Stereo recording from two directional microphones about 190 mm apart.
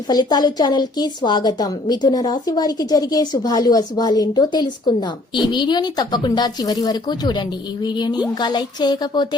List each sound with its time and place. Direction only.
0.1 s a woman's voice: 20° left (ahead or behind)